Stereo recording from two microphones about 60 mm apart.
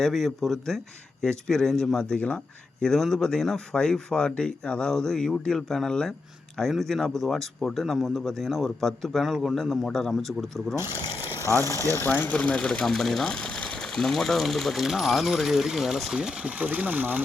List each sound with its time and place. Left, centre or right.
0.0 s speech: centre
2.1 s speech: left
2.8 s speech: centre
11.2 s a sound: left
12.0 s speech: left
12.3 s speech: left
12.8 s speech: centre
16.4 s speech: right